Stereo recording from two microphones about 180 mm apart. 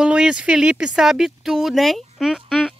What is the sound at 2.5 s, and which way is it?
Fowl, 5° left (ahead or behind).